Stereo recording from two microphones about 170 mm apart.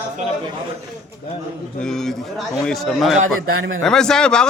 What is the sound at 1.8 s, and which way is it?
A man's voice, centre (ahead or behind).